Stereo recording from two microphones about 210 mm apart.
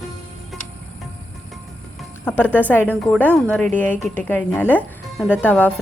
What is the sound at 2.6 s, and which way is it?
A woman's voice, 10° left (ahead or behind).